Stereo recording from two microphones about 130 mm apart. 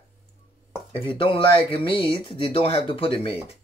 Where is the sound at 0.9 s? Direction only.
40° left (ahead or behind).